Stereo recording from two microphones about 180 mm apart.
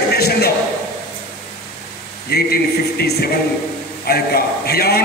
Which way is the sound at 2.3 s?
60° left (ahead or behind).